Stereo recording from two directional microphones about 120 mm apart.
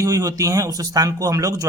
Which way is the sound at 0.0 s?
25° right (ahead or behind).